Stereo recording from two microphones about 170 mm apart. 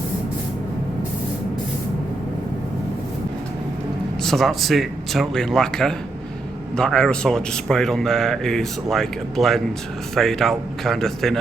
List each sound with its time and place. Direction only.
4.2 s a man's voice: centre (ahead or behind)